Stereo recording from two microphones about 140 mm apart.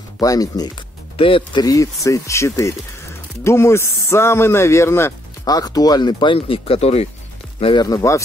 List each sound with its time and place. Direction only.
0.2 s speech: 25° left (ahead or behind)
1.1 s speech: 40° left (ahead or behind)
7.6 s speech: 30° left (ahead or behind)